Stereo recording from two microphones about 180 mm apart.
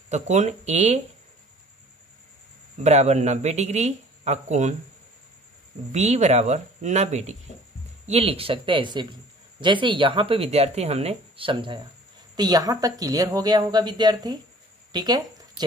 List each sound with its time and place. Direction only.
0.1 s speech: 40° right (ahead or behind)
2.8 s speech: 40° right (ahead or behind)
5.9 s speech: 40° right (ahead or behind); by 14.4 s 25° right (ahead or behind)
14.9 s a sound: 25° right (ahead or behind)